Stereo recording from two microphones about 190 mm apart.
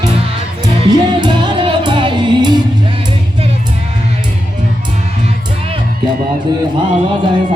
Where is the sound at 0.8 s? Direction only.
25° right (ahead or behind).